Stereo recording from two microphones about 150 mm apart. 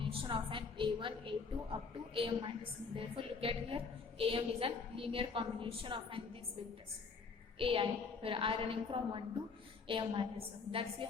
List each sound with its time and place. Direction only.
0.0 s a woman's voice: 35° right (ahead or behind)
7.6 s a woman's voice: 35° right (ahead or behind)